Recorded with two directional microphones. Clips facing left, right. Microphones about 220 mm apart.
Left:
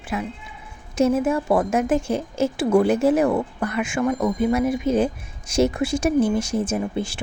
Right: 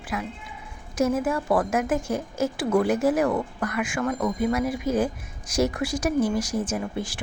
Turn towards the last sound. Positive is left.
turn(degrees=25)  # may be behind; listen again after turning